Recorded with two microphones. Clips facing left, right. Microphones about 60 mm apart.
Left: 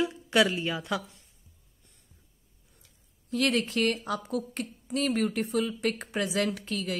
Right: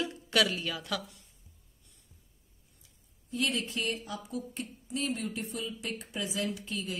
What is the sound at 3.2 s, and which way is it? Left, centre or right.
A woman's voice, left.